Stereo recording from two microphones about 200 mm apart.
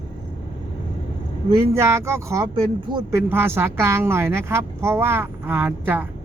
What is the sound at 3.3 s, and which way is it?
A woman's voice, 10° right (ahead or behind).